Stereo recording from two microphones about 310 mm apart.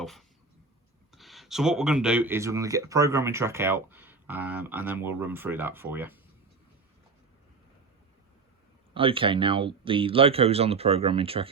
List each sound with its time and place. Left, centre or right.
0.0 s a sound: centre
1.1 s speech: centre
8.9 s speech: centre